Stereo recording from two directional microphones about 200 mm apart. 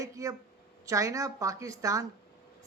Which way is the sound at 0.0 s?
15° right (ahead or behind).